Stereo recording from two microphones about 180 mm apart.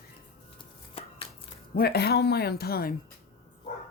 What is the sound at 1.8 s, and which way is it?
Speech, 60° left (ahead or behind).